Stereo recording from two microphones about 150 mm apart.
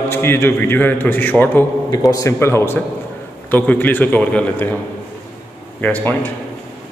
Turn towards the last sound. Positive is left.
turn(degrees=10)  # may be behind; listen again after turning